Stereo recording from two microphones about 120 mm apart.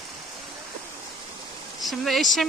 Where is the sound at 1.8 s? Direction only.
Centre (ahead or behind).